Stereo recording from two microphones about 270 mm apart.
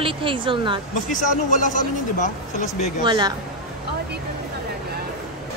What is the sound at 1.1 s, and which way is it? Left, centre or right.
Speech, left.